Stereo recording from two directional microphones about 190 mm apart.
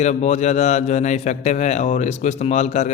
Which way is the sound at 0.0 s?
35° left (ahead or behind).